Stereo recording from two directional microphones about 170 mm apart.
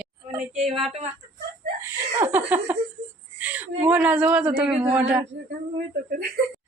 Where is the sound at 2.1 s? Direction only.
10° right (ahead or behind).